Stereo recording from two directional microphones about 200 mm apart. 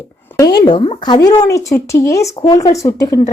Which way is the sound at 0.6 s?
25° left (ahead or behind).